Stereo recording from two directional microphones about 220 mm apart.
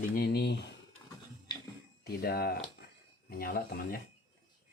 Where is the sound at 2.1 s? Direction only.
45° left (ahead or behind).